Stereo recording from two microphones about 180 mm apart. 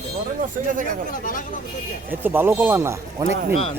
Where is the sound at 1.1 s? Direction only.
50° left (ahead or behind).